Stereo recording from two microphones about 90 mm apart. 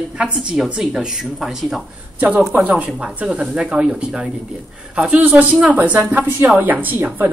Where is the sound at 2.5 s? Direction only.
15° right (ahead or behind).